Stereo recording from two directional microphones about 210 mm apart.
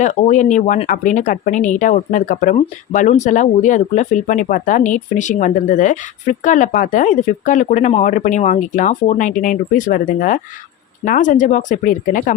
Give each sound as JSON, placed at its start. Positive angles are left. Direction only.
{"t": 0.0, "sound": "speech", "side_deg": 35}